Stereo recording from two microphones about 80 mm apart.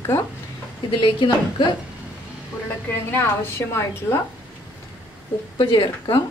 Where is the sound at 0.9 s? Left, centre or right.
Left.